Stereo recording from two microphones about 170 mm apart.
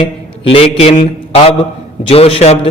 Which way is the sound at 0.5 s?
35° left (ahead or behind).